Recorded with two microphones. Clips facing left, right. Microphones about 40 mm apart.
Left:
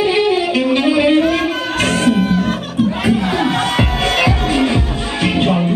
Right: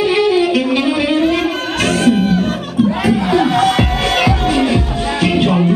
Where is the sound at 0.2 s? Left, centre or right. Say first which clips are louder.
Right 2 dB; left.